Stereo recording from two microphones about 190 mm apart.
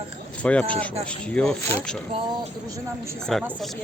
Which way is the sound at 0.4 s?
5° left (ahead or behind).